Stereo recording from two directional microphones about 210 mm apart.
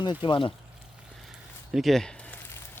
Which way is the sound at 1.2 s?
Centre (ahead or behind).